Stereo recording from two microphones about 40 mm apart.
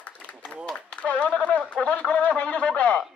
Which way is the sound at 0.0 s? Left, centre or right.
Left.